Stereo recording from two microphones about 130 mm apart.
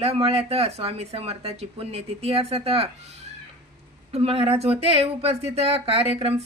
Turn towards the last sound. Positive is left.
turn(degrees=-50)  # may be behind; listen again after turning